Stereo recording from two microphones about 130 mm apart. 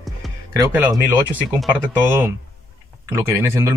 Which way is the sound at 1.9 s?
15° right (ahead or behind).